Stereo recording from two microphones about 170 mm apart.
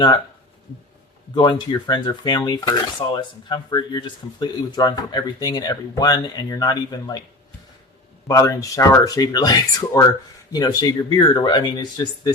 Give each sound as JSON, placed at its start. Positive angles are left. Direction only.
{"t": 1.4, "sound": "speech", "side_deg": 25}
{"t": 8.3, "sound": "speech", "side_deg": 20}